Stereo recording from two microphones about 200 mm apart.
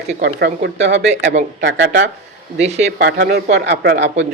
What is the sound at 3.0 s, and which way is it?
Speech, 50° right (ahead or behind).